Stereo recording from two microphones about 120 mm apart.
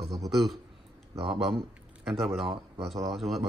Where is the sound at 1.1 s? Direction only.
45° right (ahead or behind).